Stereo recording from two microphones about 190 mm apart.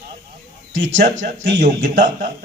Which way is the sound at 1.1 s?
75° right (ahead or behind).